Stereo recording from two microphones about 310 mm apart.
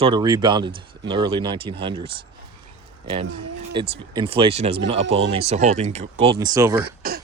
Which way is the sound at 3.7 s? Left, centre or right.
Centre.